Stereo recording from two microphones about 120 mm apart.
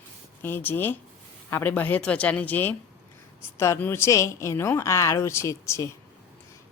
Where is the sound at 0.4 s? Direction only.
15° left (ahead or behind).